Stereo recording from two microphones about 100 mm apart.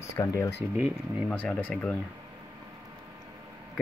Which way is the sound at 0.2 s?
35° left (ahead or behind).